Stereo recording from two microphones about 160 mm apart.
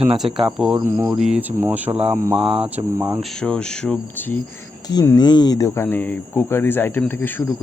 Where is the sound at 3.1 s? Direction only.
Centre (ahead or behind).